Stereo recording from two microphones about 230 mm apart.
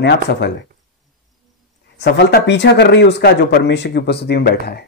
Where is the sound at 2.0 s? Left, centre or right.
Left.